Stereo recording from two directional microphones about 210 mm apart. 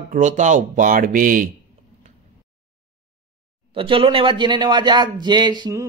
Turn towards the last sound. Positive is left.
turn(degrees=-20)  # may be behind; listen again after turning